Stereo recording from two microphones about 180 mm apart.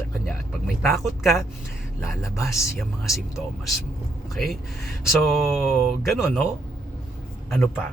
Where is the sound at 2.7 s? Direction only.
Centre (ahead or behind).